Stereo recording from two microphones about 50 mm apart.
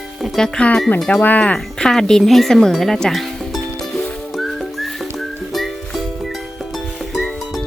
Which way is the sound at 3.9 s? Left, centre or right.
Centre.